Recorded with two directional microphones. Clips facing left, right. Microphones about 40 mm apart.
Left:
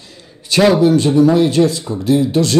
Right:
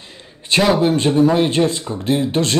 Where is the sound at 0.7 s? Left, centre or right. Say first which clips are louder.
Left 3 dB; right.